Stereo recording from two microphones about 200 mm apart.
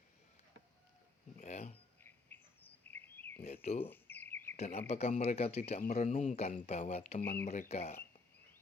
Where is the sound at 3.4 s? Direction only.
30° left (ahead or behind).